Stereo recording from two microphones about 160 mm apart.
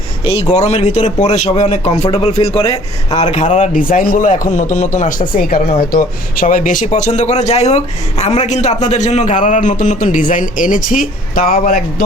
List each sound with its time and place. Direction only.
0.3 s a man's voice: 35° left (ahead or behind); by 12.0 s 60° left (ahead or behind)